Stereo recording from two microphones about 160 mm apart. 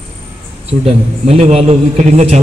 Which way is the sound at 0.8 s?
40° right (ahead or behind).